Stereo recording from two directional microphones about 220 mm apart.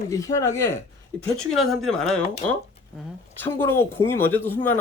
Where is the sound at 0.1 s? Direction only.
15° left (ahead or behind).